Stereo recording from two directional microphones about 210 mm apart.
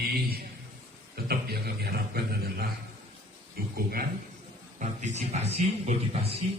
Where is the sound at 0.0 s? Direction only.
45° right (ahead or behind).